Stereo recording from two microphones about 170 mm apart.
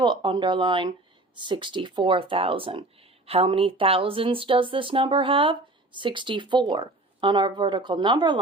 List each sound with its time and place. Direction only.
0.0 s speech: 30° right (ahead or behind)